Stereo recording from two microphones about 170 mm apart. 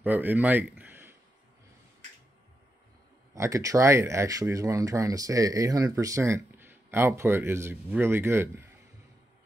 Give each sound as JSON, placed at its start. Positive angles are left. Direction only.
{"t": 0.0, "sound": "speech", "side_deg": -10}
{"t": 3.3, "sound": "speech", "side_deg": -15}